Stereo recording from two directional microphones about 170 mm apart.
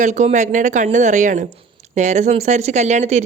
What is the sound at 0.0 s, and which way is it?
Speech, 45° right (ahead or behind).